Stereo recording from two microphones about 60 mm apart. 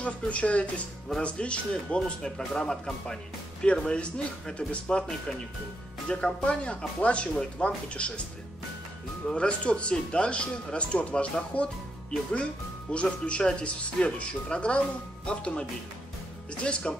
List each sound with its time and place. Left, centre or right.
0.0 s speech: left
6.0 s speech: centre
9.3 s speech: centre
16.6 s speech: centre